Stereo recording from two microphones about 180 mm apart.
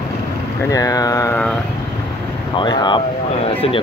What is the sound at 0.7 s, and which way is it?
Speech, 20° left (ahead or behind).